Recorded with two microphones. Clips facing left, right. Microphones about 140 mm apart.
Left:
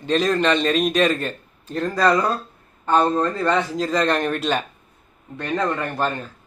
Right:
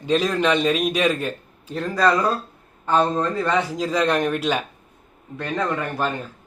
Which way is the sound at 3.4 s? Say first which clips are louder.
Left 1 dB; 10° right (ahead or behind).